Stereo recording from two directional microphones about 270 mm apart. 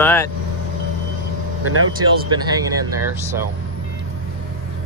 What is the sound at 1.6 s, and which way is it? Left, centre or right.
Speech, right.